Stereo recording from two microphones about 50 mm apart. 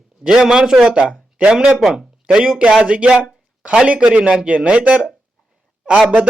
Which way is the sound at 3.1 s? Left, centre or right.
Centre.